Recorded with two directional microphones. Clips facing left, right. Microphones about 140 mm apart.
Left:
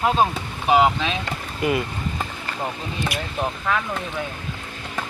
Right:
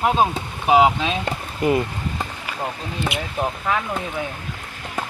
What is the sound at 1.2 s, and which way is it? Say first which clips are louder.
Boat: right 3 dB; 30° right (ahead or behind).